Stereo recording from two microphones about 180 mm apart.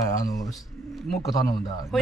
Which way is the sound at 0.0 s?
20° left (ahead or behind).